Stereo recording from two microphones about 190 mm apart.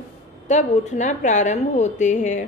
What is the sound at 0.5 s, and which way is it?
A woman's voice, 40° left (ahead or behind).